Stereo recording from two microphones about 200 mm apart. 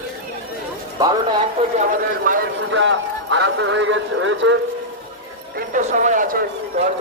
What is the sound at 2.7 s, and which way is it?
Speech, 65° right (ahead or behind).